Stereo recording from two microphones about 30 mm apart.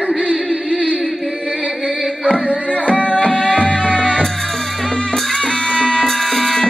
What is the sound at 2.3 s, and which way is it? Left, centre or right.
Music, left.